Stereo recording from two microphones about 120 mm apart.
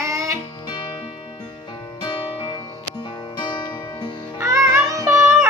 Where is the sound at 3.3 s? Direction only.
40° left (ahead or behind).